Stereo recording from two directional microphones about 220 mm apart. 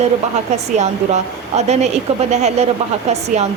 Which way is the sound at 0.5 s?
30° right (ahead or behind).